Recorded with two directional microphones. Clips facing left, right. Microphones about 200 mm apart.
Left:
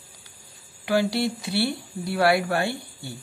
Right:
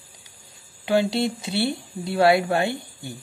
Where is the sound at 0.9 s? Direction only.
25° right (ahead or behind).